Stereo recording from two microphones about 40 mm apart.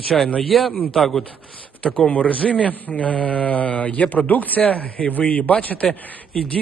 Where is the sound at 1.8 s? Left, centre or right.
Left.